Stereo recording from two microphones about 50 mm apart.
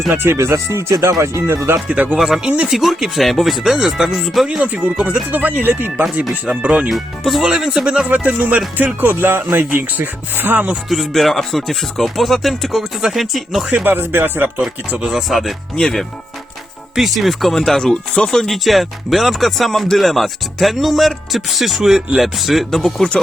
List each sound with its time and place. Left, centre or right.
0.1 s speech: right
0.3 s speech: right
1.9 s speech: right
2.1 s speech: centre
4.6 s speech: right
6.6 s speech: right
6.8 s speech: centre
7.4 s speech: centre
8.0 s speech: right
10.8 s speech: centre
13.8 s speech: right
14.8 s speech: right
15.1 s speech: centre
16.9 s speech: centre